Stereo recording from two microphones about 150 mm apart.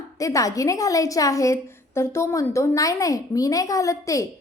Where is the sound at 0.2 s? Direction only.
20° left (ahead or behind).